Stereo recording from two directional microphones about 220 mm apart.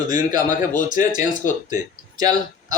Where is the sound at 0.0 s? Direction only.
15° right (ahead or behind).